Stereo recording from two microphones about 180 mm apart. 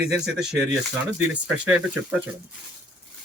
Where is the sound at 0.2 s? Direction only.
5° right (ahead or behind).